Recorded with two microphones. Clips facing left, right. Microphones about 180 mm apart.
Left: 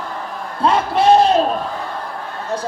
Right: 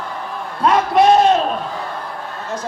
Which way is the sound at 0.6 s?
30° left (ahead or behind).